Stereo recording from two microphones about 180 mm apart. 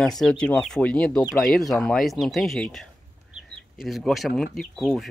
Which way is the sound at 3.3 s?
Centre (ahead or behind).